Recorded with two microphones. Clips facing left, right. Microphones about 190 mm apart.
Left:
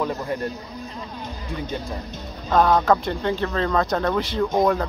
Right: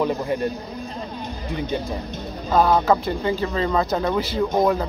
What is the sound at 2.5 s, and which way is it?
Speech, 5° right (ahead or behind).